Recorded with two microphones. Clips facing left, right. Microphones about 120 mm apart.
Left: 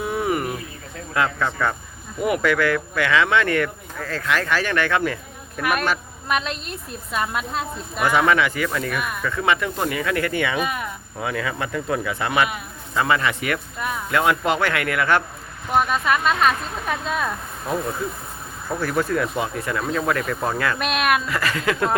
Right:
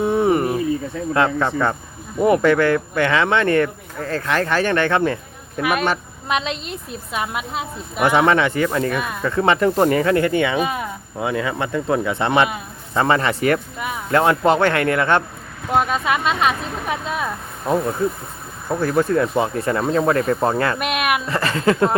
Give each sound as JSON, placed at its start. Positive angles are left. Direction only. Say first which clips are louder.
{"t": 0.0, "sound": "a sound", "louder": "right 6 dB", "side_deg": -30}
{"t": 1.1, "sound": "a woman's voice", "louder": "right 4 dB", "side_deg": -30}
{"t": 8.0, "sound": "a woman's voice", "louder": "right 3 dB", "side_deg": -30}
{"t": 18.7, "sound": "speech", "louder": "right 5 dB", "side_deg": -25}
{"t": 20.7, "sound": "a woman's voice", "louder": "even", "side_deg": -15}
{"t": 21.2, "sound": "speech", "louder": "right 5 dB", "side_deg": -30}